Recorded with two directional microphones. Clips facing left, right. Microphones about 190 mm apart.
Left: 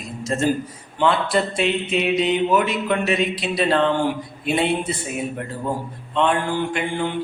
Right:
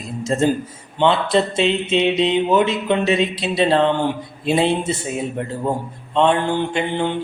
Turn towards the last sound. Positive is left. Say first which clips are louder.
# right 3 dB
turn(degrees=-25)  # may be behind; listen again after turning